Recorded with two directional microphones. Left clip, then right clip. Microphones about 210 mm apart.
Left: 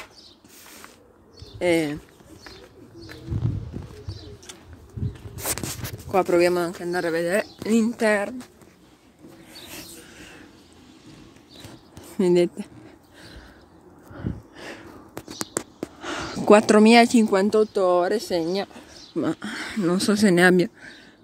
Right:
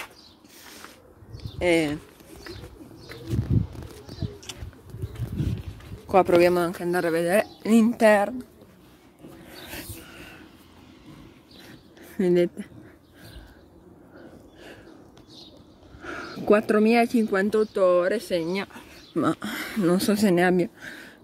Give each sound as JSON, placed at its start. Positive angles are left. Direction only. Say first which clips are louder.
{"t": 1.6, "sound": "speech", "louder": "even", "side_deg": 15}
{"t": 6.0, "sound": "speech", "louder": "right 1 dB", "side_deg": -5}
{"t": 9.5, "sound": "a sound", "louder": "right 1 dB", "side_deg": -20}
{"t": 12.2, "sound": "speech", "louder": "left 2 dB", "side_deg": 10}
{"t": 16.0, "sound": "speech", "louder": "left 4 dB", "side_deg": 15}
{"t": 18.4, "sound": "speech", "louder": "left 3 dB", "side_deg": -10}
{"t": 19.7, "sound": "speech", "louder": "even", "side_deg": 5}